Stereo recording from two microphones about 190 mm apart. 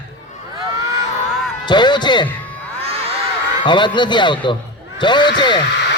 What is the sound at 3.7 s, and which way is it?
Speech, 25° left (ahead or behind).